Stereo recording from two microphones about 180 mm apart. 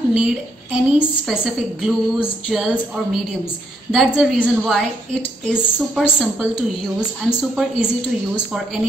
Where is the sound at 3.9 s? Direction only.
Centre (ahead or behind).